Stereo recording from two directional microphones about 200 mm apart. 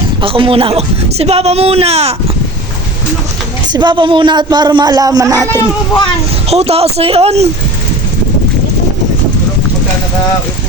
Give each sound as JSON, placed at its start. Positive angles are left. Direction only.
{"t": 0.2, "sound": "a man's voice", "side_deg": -25}
{"t": 3.7, "sound": "speech", "side_deg": -20}
{"t": 6.5, "sound": "a man's voice", "side_deg": -30}